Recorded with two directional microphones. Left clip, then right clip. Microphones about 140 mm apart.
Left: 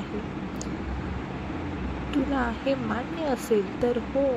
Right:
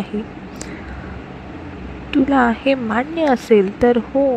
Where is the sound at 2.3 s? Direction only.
75° right (ahead or behind).